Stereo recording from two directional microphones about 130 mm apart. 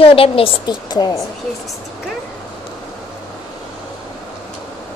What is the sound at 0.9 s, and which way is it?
Speech, 35° left (ahead or behind).